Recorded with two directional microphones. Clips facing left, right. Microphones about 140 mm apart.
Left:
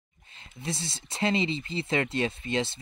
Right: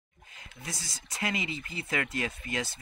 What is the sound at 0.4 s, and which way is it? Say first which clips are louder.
Speech: left 7 dB; 25° left (ahead or behind).